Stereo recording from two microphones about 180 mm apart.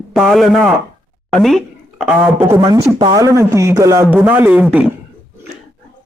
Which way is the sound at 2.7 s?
20° right (ahead or behind).